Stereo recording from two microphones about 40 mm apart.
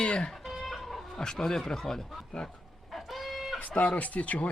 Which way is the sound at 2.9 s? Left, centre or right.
Centre.